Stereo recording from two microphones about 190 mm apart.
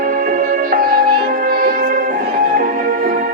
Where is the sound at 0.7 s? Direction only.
50° right (ahead or behind).